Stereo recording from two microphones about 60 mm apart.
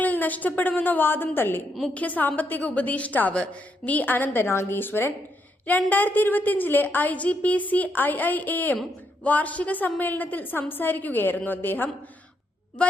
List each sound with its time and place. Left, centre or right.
0.0 s a woman's voice: left
1.9 s a woman's voice: left